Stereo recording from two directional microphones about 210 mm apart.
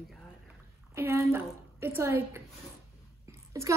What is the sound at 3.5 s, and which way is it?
Speech, 15° right (ahead or behind).